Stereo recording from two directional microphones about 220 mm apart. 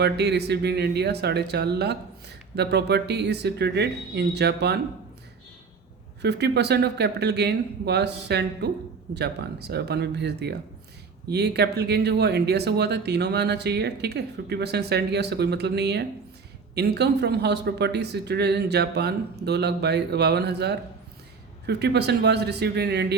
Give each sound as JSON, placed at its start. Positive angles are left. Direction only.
{"t": 0.0, "sound": "speech", "side_deg": -50}
{"t": 6.2, "sound": "speech", "side_deg": -50}